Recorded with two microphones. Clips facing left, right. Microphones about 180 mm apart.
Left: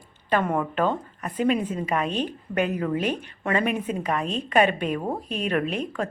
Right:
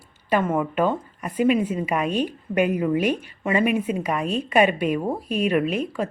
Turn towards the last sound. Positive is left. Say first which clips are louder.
# right 3 dB
turn(degrees=-10)  # may be behind; listen again after turning